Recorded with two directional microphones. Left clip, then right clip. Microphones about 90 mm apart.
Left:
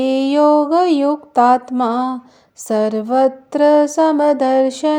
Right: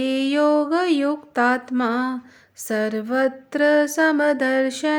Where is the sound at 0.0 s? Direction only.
25° left (ahead or behind).